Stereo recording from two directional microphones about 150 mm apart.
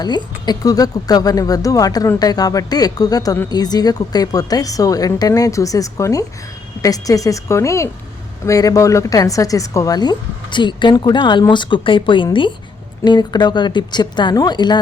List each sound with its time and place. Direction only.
0.0 s a woman's voice: 25° left (ahead or behind)